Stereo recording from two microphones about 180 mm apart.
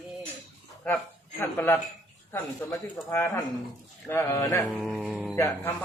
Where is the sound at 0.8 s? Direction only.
5° left (ahead or behind).